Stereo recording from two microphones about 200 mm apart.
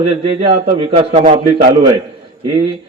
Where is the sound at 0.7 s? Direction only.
25° right (ahead or behind).